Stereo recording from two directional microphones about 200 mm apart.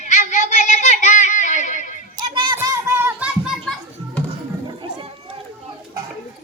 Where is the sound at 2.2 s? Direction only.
25° right (ahead or behind).